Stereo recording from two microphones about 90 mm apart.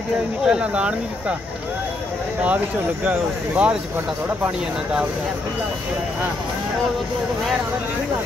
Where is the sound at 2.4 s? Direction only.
15° right (ahead or behind).